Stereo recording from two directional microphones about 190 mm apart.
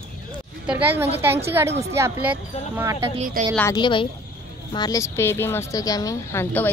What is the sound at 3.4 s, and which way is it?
Speech, 45° right (ahead or behind).